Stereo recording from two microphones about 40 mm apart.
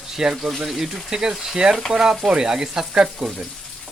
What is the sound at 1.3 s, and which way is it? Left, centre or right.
Speech, centre.